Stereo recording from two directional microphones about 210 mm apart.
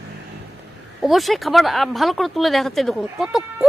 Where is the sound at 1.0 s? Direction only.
Centre (ahead or behind).